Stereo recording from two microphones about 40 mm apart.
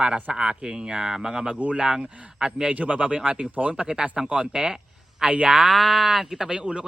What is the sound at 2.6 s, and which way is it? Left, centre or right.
A man's voice, right.